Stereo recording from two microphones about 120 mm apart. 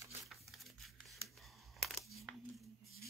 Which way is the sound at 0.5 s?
Centre (ahead or behind).